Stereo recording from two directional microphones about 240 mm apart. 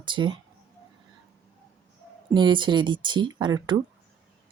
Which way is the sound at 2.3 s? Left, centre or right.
Centre.